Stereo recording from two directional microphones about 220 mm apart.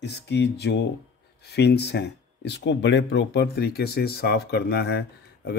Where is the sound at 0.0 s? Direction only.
50° left (ahead or behind).